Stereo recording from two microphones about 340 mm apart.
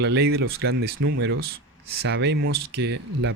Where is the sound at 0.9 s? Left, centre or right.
Right.